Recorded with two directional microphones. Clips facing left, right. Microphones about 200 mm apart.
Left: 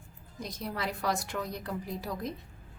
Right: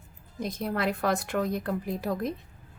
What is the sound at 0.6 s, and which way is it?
A woman's voice, 55° right (ahead or behind).